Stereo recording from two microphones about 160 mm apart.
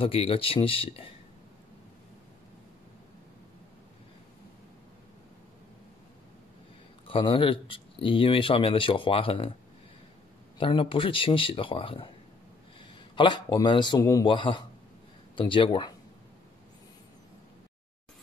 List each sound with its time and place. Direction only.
0.0 s speech: 35° left (ahead or behind)
7.1 s speech: 35° left (ahead or behind)
10.6 s speech: 35° left (ahead or behind)
13.1 s speech: 30° left (ahead or behind)